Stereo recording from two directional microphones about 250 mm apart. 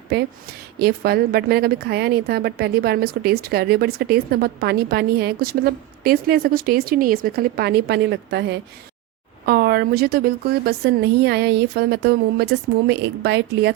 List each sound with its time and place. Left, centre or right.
0.8 s a woman's voice: right